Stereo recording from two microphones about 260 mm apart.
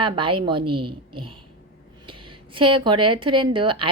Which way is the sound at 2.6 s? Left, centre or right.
Centre.